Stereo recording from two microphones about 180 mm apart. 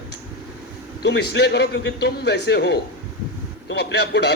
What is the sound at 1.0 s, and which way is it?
A man's voice, 70° left (ahead or behind).